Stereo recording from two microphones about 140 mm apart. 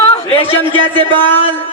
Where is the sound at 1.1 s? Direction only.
15° left (ahead or behind).